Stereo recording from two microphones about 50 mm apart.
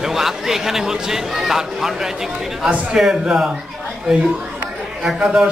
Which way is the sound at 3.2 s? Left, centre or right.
Centre.